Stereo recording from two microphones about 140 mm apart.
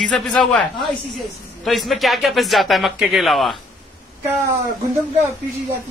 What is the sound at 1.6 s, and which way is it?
A man's voice, centre (ahead or behind).